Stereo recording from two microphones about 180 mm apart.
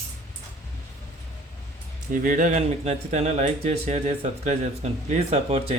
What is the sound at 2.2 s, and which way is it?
Speech, 45° right (ahead or behind).